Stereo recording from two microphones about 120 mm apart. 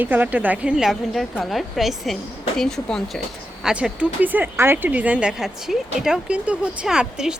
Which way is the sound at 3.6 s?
10° right (ahead or behind).